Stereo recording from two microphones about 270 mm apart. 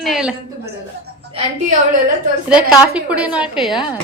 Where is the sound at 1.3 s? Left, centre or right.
Right.